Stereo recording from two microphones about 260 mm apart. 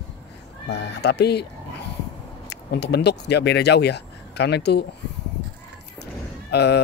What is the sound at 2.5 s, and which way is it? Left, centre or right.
Speech, left.